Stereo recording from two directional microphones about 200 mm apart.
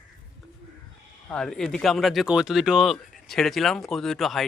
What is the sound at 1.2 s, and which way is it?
Speech, 5° left (ahead or behind).